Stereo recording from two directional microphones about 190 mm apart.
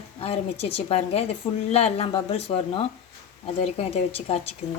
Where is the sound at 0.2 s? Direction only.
30° left (ahead or behind).